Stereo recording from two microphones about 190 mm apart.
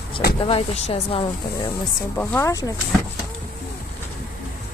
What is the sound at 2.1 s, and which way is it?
Speech, 10° left (ahead or behind).